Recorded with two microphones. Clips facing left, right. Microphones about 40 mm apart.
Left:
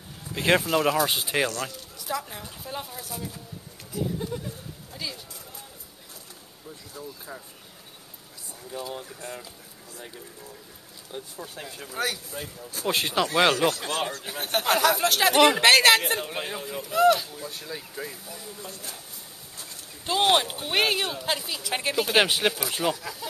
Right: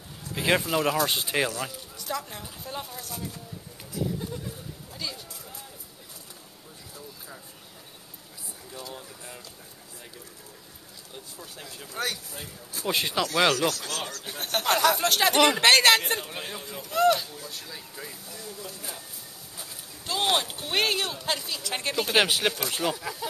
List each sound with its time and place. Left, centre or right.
0.3 s speech: centre
2.0 s a woman's voice: centre
7.0 s a woman's voice: centre
8.7 s a woman's voice: centre
11.1 s speech: left
11.9 s a woman's voice: centre
13.4 s speech: left
14.2 s a woman's voice: centre
17.5 s a woman's voice: centre
20.1 s a woman's voice: centre
22.9 s speech: centre